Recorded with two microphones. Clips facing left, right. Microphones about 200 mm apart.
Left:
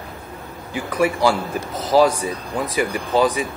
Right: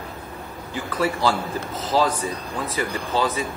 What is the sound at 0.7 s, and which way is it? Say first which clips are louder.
Speech: left 4 dB; 15° left (ahead or behind).